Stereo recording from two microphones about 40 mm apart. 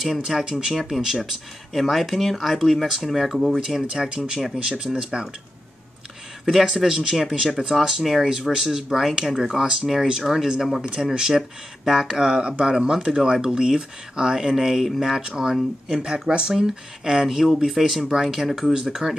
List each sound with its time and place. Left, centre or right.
0.0 s speech: centre
1.7 s speech: centre
6.7 s speech: centre
11.9 s speech: centre
12.2 s speech: right
16.1 s speech: right